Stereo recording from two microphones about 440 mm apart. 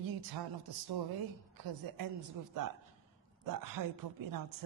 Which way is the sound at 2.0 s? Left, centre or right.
Right.